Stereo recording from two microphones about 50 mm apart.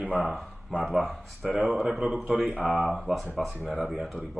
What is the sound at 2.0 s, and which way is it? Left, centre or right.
Speech, right.